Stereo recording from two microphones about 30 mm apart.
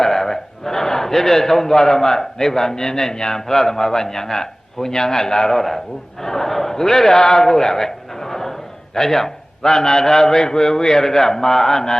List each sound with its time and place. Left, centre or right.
0.0 s a man's voice: centre
5.5 s a man's voice: centre
6.5 s a sound: centre
9.0 s a man's voice: centre